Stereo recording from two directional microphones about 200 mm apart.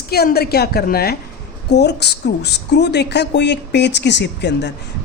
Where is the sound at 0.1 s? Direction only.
50° left (ahead or behind).